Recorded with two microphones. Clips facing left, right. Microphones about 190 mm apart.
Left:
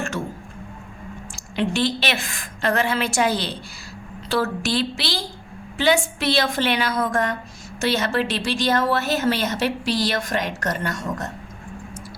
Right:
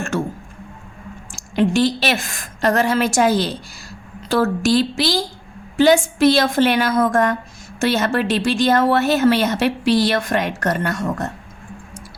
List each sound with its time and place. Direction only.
1.4 s a woman's voice: 45° right (ahead or behind)